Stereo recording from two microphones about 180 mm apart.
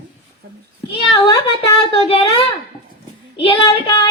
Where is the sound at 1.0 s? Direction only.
30° left (ahead or behind).